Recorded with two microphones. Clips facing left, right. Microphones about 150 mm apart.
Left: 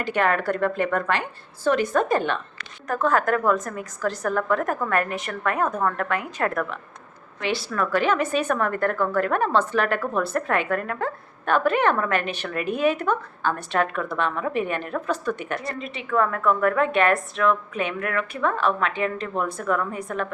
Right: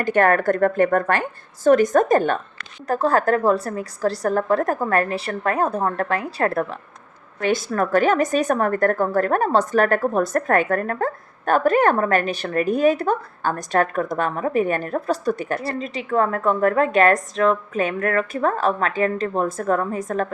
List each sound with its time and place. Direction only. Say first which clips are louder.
0.0 s a woman's voice: right 5 dB; 45° right (ahead or behind)
7.4 s a woman's voice: right 5 dB; 45° right (ahead or behind)